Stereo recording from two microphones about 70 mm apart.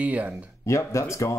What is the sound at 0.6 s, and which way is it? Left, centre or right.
Speech, left.